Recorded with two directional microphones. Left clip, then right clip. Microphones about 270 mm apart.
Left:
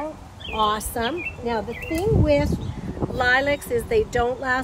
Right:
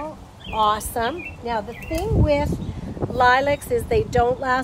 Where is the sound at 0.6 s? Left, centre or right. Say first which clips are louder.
Right 2 dB; centre.